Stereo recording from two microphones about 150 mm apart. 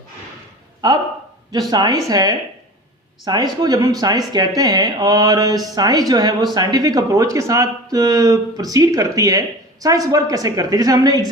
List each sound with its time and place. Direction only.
1.7 s speech: 25° right (ahead or behind)